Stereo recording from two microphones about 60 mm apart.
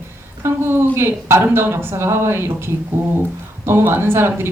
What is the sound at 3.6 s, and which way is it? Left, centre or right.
Speech, right.